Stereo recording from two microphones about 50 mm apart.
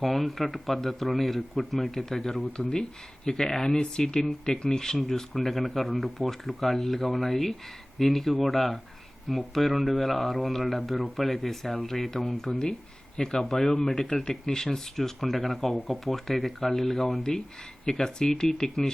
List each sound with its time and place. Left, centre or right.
0.0 s speech: centre
2.6 s speech: centre
17.8 s speech: centre